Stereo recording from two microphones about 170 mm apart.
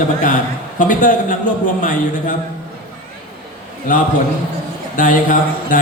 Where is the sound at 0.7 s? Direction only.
50° left (ahead or behind).